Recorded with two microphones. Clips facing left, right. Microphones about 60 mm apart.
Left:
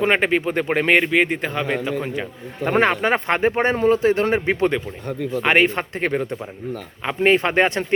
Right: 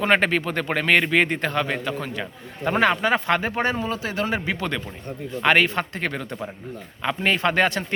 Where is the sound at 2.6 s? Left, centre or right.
Left.